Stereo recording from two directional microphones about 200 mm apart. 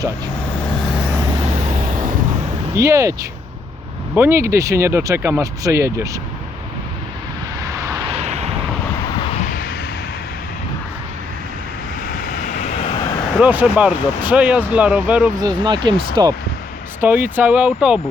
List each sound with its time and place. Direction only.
2.7 s speech: 15° right (ahead or behind)
8.1 s vehicle: 35° right (ahead or behind)
12.4 s vehicle: 35° left (ahead or behind)
13.4 s speech: 5° right (ahead or behind)
15.4 s speech: 20° right (ahead or behind)
17.0 s speech: 10° right (ahead or behind)